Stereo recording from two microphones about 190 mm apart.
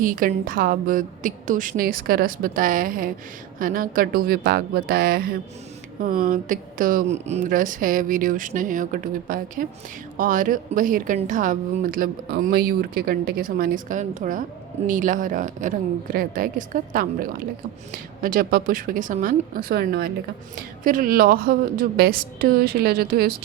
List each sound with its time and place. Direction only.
0.0 s a woman's voice: 45° right (ahead or behind)